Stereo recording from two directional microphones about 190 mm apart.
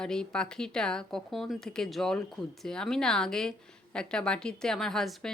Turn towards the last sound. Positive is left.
turn(degrees=0)  # may be behind; listen again after turning